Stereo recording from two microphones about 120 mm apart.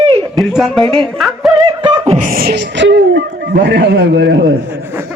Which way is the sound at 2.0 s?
60° right (ahead or behind).